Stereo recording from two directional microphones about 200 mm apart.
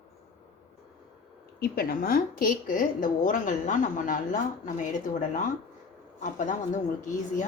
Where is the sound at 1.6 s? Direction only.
45° left (ahead or behind).